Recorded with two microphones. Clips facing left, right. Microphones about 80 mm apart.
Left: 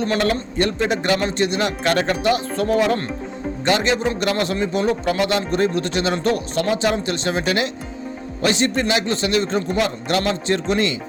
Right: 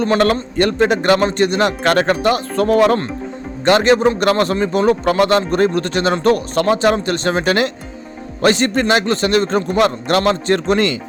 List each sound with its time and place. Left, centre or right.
0.2 s speech: right